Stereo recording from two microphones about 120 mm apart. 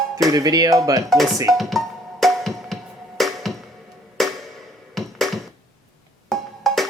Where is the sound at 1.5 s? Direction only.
Centre (ahead or behind).